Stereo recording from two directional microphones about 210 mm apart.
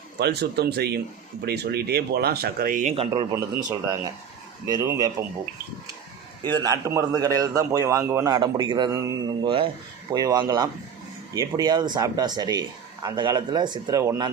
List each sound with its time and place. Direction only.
0.2 s speech: 50° right (ahead or behind)
2.9 s a man's voice: 25° right (ahead or behind)
6.4 s a man's voice: 20° right (ahead or behind)